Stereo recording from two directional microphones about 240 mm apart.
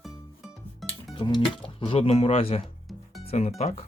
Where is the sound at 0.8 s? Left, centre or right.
Centre.